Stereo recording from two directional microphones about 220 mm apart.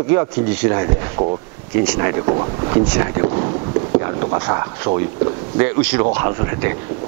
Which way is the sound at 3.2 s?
25° right (ahead or behind).